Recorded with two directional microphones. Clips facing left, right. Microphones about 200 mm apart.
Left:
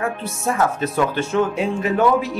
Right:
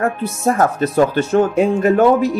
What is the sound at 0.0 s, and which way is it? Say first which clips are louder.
Speech: right 6 dB; 45° right (ahead or behind).